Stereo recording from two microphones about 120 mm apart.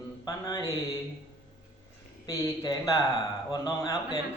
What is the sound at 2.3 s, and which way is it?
Speech, 25° left (ahead or behind).